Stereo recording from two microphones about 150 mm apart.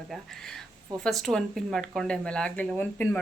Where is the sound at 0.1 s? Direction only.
5° left (ahead or behind).